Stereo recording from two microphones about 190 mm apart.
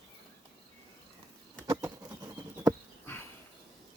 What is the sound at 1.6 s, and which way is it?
Patter, 20° right (ahead or behind).